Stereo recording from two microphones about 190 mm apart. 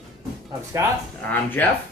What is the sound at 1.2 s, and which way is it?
Speech, 10° left (ahead or behind).